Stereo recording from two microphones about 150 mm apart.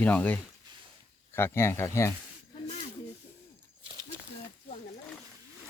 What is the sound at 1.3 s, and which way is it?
Speech, 15° left (ahead or behind).